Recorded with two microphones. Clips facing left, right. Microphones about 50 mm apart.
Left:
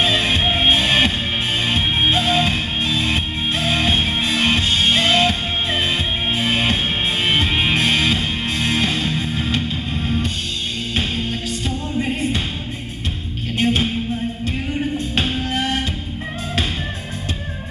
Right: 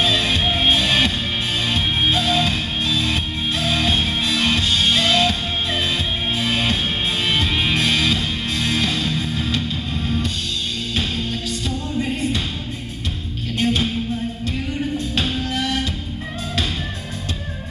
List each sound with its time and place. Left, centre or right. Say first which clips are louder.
0.0 s music: left 1 dB; left
13.6 s music: left 1 dB; left